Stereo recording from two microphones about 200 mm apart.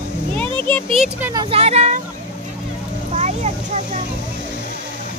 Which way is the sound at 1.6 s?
35° right (ahead or behind).